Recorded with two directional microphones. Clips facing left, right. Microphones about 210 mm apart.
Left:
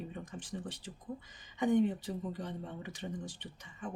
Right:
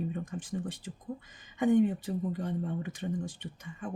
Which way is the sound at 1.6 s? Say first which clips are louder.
Right 4 dB; 50° right (ahead or behind).